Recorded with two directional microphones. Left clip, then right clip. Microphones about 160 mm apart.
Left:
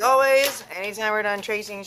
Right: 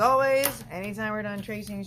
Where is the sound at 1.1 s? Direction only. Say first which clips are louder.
Left 9 dB; 30° left (ahead or behind).